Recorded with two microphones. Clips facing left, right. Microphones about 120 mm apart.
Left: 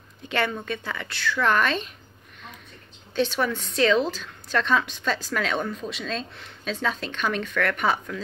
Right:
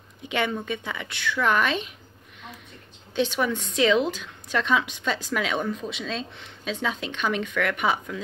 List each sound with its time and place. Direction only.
0.7 s a woman's voice: 15° right (ahead or behind)
3.2 s a woman's voice: 15° right (ahead or behind)